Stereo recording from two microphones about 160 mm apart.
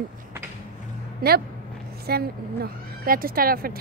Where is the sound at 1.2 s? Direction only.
75° right (ahead or behind).